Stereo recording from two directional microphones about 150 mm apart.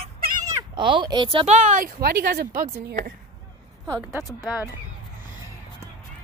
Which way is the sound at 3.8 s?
20° right (ahead or behind).